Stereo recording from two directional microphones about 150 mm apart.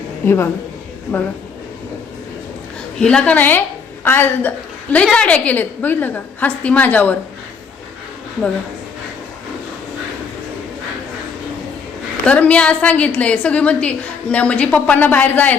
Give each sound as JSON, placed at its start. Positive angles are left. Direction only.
{"t": 0.3, "sound": "a woman's voice", "side_deg": 15}
{"t": 3.0, "sound": "a woman's voice", "side_deg": 5}
{"t": 12.2, "sound": "a woman's voice", "side_deg": 10}